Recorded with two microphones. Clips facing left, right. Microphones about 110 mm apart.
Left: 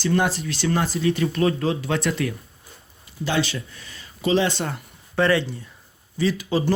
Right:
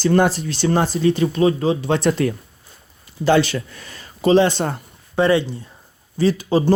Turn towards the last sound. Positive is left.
turn(degrees=-35)  # may be behind; listen again after turning